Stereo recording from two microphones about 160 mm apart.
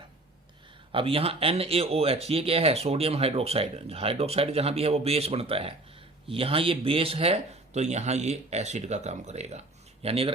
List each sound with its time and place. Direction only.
0.9 s speech: 35° right (ahead or behind)